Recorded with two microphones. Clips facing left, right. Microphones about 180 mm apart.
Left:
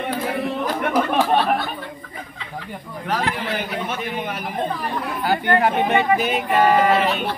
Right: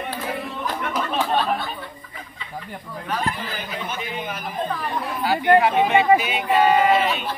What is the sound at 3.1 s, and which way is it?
Speech, 80° left.